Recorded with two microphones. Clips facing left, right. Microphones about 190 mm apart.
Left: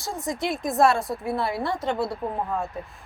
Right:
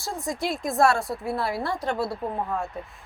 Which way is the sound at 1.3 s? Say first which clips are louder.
Left 1 dB; centre (ahead or behind).